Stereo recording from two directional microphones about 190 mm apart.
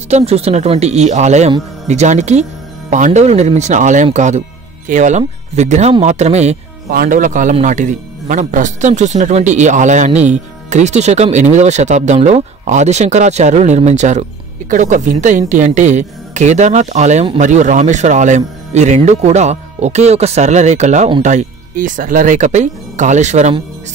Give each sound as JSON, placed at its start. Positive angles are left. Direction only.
{"t": 0.1, "sound": "speech", "side_deg": -35}
{"t": 6.9, "sound": "speech", "side_deg": -50}